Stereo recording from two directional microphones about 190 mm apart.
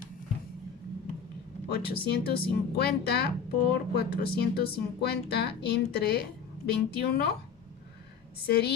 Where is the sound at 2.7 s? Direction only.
55° left (ahead or behind).